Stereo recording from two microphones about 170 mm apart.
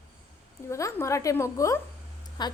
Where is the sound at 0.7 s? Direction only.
15° left (ahead or behind).